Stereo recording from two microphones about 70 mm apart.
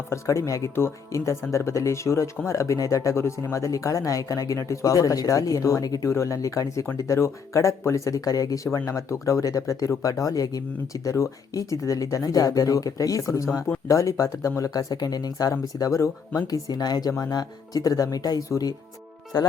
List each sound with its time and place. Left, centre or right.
0.1 s speech: left
11.1 s speech: left
15.8 s speech: left
16.5 s speech: left
19.3 s music: left